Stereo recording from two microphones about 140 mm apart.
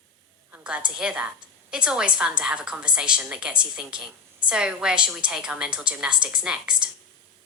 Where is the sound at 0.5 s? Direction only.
10° right (ahead or behind).